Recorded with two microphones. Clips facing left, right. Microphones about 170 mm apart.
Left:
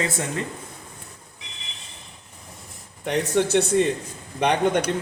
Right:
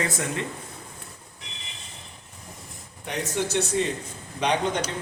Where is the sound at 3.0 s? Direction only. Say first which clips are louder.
Left 7 dB; 55° left (ahead or behind).